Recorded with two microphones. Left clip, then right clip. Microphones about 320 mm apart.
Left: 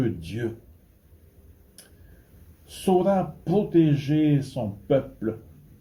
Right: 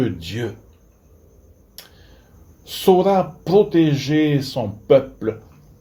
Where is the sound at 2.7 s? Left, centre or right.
Right.